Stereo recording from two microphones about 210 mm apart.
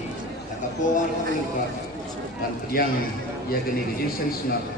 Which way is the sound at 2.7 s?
45° left (ahead or behind).